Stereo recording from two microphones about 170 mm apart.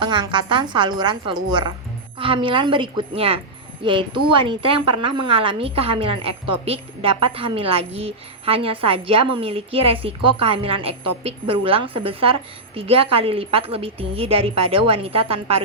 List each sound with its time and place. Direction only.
0.0 s a woman's voice: 25° right (ahead or behind)